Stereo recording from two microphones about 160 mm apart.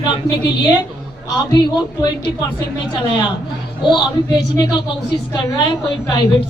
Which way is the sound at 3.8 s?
30° left (ahead or behind).